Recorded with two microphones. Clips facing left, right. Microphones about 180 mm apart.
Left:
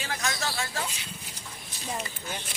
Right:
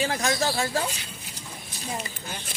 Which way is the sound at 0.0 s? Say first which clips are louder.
Right 7 dB; 30° right (ahead or behind).